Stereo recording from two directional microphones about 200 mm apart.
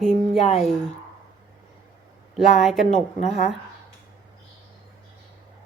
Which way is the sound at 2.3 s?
Centre (ahead or behind).